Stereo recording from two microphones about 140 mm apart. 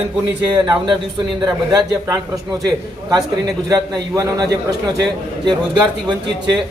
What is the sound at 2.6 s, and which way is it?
A man's voice, 25° right (ahead or behind).